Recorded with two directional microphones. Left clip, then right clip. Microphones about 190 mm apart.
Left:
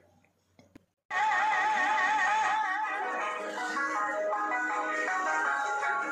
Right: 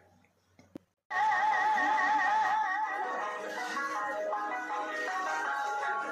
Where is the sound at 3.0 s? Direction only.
20° left (ahead or behind).